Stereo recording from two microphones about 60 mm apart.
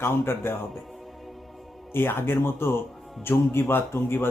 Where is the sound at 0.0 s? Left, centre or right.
Left.